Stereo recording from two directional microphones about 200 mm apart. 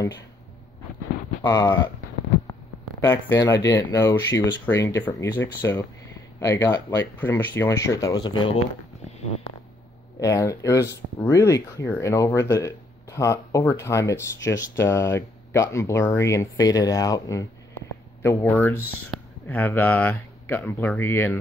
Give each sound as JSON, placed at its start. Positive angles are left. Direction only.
{"t": 1.4, "sound": "speech", "side_deg": 20}
{"t": 3.0, "sound": "speech", "side_deg": 10}
{"t": 10.2, "sound": "speech", "side_deg": 15}